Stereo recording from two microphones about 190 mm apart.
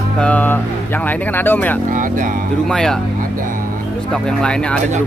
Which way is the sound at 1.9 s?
45° right (ahead or behind).